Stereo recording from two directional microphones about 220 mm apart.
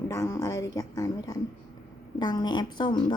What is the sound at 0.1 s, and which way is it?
A woman's voice, 15° left (ahead or behind).